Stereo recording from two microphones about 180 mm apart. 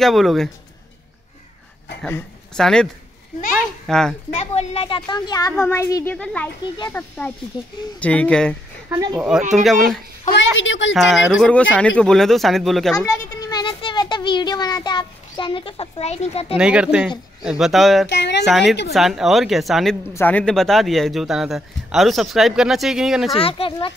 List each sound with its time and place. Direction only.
0.0 s speech: centre (ahead or behind)
2.0 s a child's voice: 5° left (ahead or behind)
4.3 s a woman's voice: 40° left (ahead or behind); by 6.1 s 15° left (ahead or behind)
6.1 s speech: 5° left (ahead or behind)
8.9 s speech: 20° right (ahead or behind)
9.5 s speech: centre (ahead or behind)
10.3 s a woman's voice: 90° left
11.0 s speech: centre (ahead or behind)
12.9 s a child's voice: 15° left (ahead or behind); by 16.5 s 35° left (ahead or behind)
16.5 s speech: 5° right (ahead or behind)
18.0 s speech: 75° left (ahead or behind)
18.4 s speech: centre (ahead or behind)
23.3 s a woman's voice: 30° left (ahead or behind)